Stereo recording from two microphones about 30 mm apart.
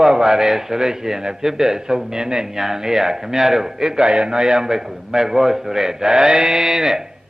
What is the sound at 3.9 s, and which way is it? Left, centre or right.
A man's voice, right.